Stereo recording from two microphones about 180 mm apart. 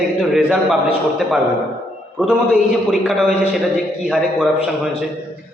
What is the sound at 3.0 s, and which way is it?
A man's voice, centre (ahead or behind).